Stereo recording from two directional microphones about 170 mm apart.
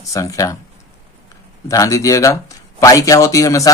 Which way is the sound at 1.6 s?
20° left (ahead or behind).